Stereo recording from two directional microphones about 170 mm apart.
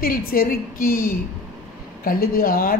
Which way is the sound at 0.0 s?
60° left (ahead or behind).